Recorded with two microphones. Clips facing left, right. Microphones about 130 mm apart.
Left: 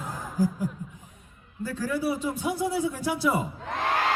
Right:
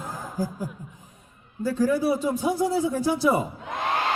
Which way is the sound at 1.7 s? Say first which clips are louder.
Right 5 dB; 35° right (ahead or behind).